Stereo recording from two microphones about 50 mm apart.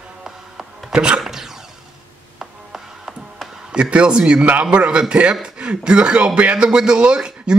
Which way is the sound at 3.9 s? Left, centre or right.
Right.